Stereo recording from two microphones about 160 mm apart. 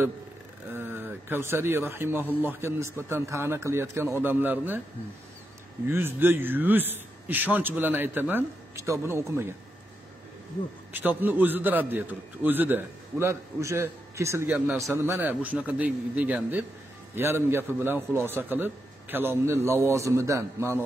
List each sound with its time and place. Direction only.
0.7 s a man's voice: 15° right (ahead or behind)
5.9 s a man's voice: 15° right (ahead or behind)
10.9 s a man's voice: 10° right (ahead or behind)